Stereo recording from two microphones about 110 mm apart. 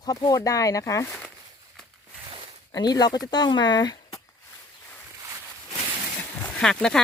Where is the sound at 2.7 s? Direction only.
35° left (ahead or behind).